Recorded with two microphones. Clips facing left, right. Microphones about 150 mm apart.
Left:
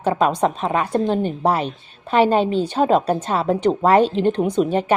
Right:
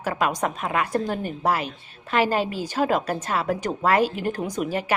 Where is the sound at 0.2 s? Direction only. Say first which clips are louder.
Left 6 dB; 30° left (ahead or behind).